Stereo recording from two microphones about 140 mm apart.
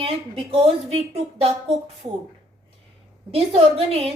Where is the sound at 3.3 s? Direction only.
45° right (ahead or behind).